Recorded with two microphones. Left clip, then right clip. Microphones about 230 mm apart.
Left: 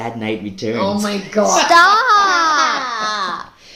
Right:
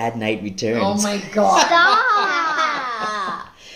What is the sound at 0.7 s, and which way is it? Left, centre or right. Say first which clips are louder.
Speech: left 2 dB; centre.